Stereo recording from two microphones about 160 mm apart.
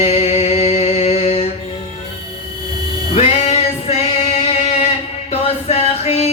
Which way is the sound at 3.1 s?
40° left (ahead or behind).